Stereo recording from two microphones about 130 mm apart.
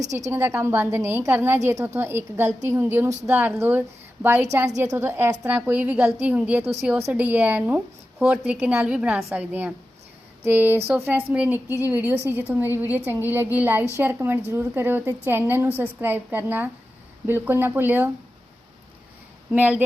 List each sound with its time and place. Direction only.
0.0 s a woman's voice: 65° right (ahead or behind)
0.3 s a woman's voice: 20° right (ahead or behind)
19.5 s a woman's voice: 10° right (ahead or behind)